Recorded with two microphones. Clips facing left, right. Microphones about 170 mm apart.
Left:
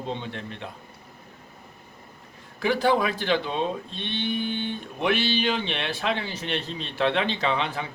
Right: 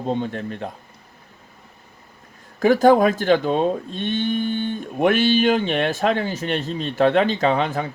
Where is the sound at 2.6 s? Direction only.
45° right (ahead or behind).